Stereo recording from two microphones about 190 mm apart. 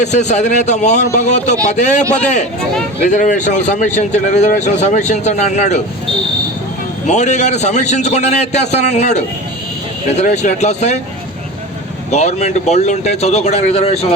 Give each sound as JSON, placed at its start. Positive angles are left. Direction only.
{"t": 0.0, "sound": "speech", "side_deg": 40}
{"t": 7.1, "sound": "speech", "side_deg": 35}
{"t": 12.1, "sound": "speech", "side_deg": 35}